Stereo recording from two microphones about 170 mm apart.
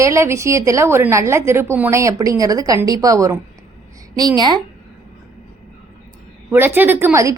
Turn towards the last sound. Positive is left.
turn(degrees=-15)  # may be behind; listen again after turning